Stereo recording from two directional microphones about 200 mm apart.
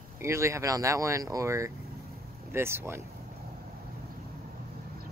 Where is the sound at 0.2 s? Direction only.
15° right (ahead or behind).